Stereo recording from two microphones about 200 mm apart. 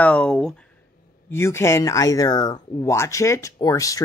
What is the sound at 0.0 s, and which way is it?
Speech, 5° left (ahead or behind).